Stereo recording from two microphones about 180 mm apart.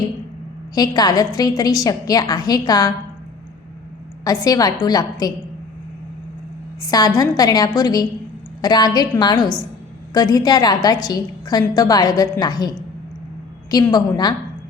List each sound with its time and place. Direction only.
0.7 s a woman's voice: 20° left (ahead or behind)
4.2 s a woman's voice: 20° left (ahead or behind)
6.8 s a woman's voice: 20° left (ahead or behind)
13.9 s a woman's voice: 20° left (ahead or behind)